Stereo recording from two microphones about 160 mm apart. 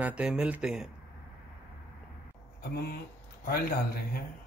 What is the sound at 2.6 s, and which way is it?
Speech, 90° left.